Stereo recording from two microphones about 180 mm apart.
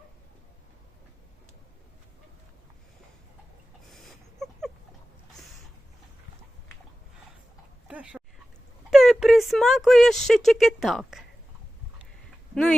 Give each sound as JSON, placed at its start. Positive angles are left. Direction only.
{"t": 3.9, "sound": "dog", "side_deg": 0}
{"t": 7.9, "sound": "dog", "side_deg": -5}
{"t": 8.9, "sound": "speech", "side_deg": 0}